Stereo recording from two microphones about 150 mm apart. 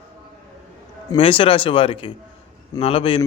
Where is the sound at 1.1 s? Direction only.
35° left (ahead or behind).